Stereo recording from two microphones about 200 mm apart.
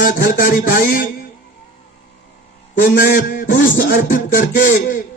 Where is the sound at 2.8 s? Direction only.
45° left (ahead or behind).